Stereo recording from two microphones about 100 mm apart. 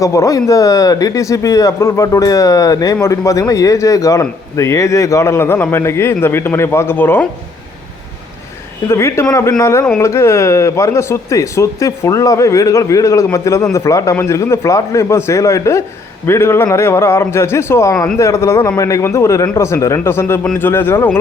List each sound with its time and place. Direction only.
0.0 s a man's voice: 30° left (ahead or behind)
8.9 s a man's voice: 25° left (ahead or behind)